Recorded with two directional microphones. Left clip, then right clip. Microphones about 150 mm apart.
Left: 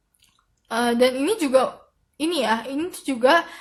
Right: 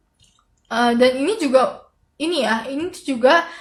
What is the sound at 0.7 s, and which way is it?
A woman's voice, 35° left (ahead or behind).